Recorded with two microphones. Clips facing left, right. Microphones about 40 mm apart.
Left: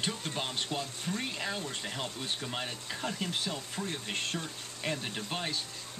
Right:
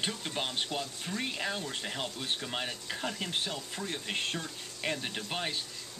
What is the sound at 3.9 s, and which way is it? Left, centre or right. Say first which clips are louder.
Speech: right 3 dB; right.